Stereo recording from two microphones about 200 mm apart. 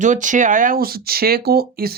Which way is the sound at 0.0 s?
40° right (ahead or behind).